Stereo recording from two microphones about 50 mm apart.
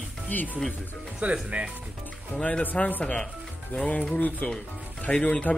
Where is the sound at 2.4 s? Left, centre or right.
Left.